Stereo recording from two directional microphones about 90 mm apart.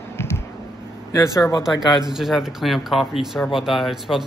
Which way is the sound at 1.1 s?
35° left (ahead or behind).